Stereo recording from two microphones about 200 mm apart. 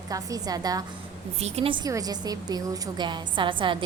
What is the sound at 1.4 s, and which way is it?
A woman's voice, 30° right (ahead or behind).